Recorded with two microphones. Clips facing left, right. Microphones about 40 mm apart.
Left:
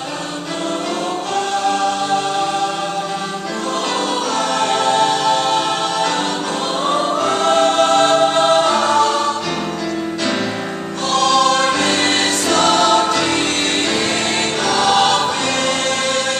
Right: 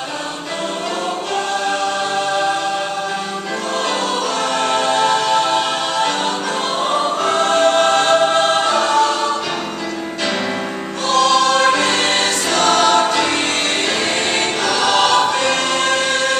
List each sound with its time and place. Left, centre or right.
4.6 s music: centre
7.2 s choir: centre
7.8 s choir: centre
8.5 s choir: centre
11.3 s choir: centre
12.9 s music: centre
14.7 s choir: centre